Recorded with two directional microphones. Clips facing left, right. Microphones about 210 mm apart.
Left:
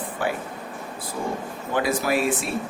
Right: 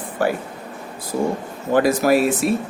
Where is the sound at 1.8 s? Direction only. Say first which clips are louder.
Right 7 dB; 40° right (ahead or behind).